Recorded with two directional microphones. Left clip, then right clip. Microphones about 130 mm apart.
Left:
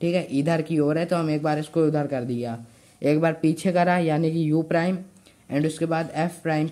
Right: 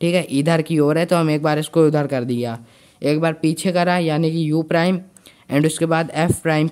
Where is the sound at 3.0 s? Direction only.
20° right (ahead or behind).